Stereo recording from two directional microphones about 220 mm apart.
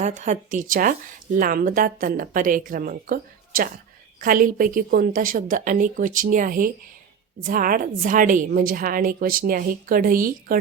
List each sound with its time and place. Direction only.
0.0 s a woman's voice: 35° right (ahead or behind)